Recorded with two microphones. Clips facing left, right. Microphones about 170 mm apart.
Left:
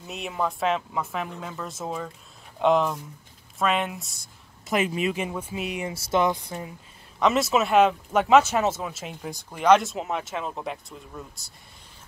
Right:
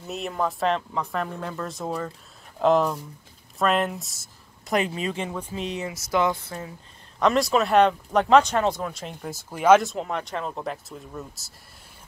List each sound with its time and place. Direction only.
0.0 s speech: centre (ahead or behind)
5.0 s speech: 10° left (ahead or behind)
5.9 s speech: 25° left (ahead or behind)
6.2 s speech: 15° left (ahead or behind)
7.2 s speech: centre (ahead or behind)